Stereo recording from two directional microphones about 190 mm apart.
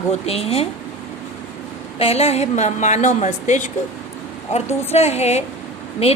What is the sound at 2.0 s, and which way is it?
A woman's voice, 30° left (ahead or behind).